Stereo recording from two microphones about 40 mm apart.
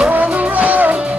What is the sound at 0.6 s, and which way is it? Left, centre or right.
Music, right.